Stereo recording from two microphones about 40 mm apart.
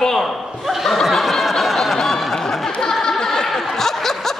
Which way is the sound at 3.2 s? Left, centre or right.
Centre.